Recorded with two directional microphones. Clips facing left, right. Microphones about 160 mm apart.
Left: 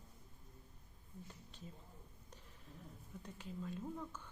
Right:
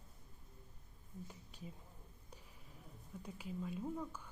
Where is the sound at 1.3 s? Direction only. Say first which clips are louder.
Right 2 dB; 10° right (ahead or behind).